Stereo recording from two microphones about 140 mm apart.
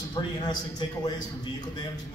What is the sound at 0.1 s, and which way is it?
A man's voice, 30° left (ahead or behind).